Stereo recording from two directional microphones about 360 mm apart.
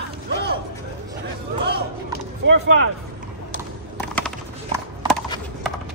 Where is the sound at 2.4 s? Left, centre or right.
Right.